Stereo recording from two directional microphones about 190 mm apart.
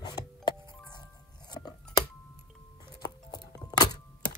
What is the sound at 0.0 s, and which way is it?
Power windows, 20° left (ahead or behind).